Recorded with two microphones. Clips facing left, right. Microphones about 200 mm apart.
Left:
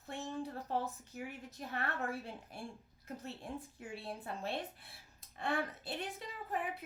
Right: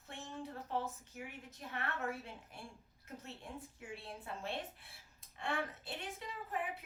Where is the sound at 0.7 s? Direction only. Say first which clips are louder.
Even; 35° left (ahead or behind).